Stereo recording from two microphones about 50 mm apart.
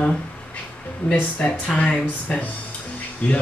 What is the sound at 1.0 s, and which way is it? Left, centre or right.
Speech, left.